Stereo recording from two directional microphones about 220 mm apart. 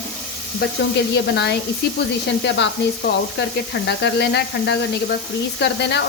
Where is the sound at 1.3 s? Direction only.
50° left (ahead or behind).